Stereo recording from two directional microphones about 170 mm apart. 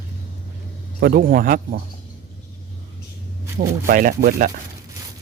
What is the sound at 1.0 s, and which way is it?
Speech, 60° right (ahead or behind).